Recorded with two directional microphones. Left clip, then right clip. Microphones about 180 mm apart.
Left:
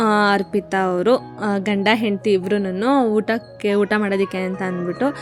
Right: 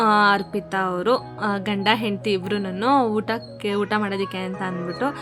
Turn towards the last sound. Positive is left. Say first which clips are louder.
# left 4 dB
turn(degrees=20)  # may be behind; listen again after turning